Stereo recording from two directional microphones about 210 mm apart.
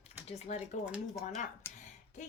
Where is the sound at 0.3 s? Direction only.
30° left (ahead or behind).